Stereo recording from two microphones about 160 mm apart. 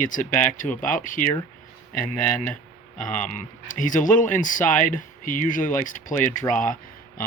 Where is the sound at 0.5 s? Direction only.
55° left (ahead or behind).